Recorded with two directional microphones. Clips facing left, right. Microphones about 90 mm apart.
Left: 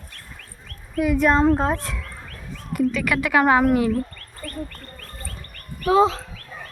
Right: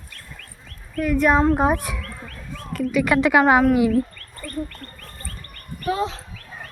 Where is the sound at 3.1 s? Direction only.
25° right (ahead or behind).